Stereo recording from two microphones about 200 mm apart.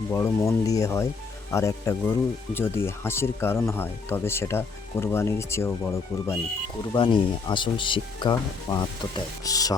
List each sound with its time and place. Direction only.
0.1 s speech: 15° left (ahead or behind)
6.9 s speech: 25° left (ahead or behind)